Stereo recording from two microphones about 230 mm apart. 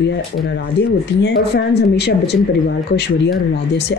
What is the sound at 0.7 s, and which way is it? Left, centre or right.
Speech, left.